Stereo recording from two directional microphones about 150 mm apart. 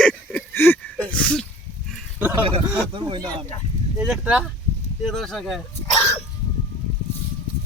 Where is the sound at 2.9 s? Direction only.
35° right (ahead or behind).